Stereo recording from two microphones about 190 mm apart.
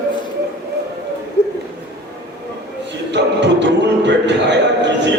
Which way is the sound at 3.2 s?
65° right (ahead or behind).